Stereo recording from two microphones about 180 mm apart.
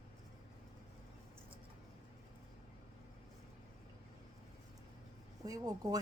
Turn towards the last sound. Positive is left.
turn(degrees=-20)  # may be behind; listen again after turning